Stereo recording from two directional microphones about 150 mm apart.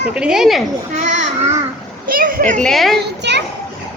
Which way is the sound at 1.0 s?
50° right (ahead or behind).